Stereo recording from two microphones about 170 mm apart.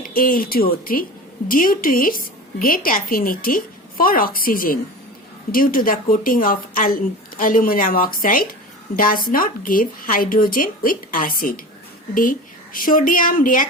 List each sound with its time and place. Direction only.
0.0 s a woman's voice: 55° left (ahead or behind)